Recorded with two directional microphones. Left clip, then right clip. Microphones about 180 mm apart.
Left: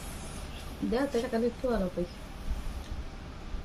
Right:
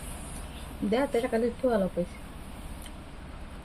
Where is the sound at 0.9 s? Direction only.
45° right (ahead or behind).